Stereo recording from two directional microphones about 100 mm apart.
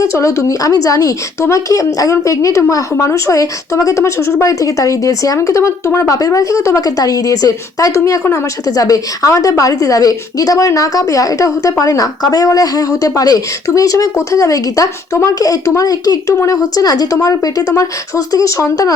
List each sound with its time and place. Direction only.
0.0 s a woman's voice: 30° left (ahead or behind)